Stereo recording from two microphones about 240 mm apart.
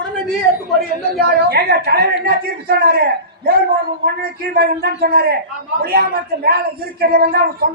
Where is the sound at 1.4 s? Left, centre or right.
Right.